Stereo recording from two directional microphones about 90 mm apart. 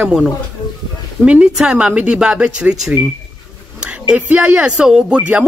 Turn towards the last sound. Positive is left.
turn(degrees=-15)  # may be behind; listen again after turning